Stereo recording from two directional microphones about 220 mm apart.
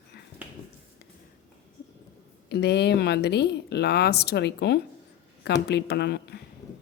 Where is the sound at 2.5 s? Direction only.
50° left (ahead or behind).